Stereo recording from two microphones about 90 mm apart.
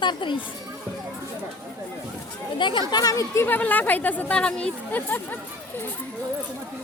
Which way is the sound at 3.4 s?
20° left (ahead or behind).